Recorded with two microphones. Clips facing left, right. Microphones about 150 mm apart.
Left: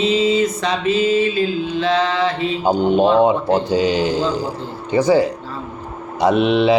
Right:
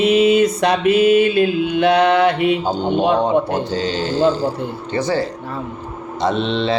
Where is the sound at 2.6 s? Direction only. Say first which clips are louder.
Left 3 dB; 10° left (ahead or behind).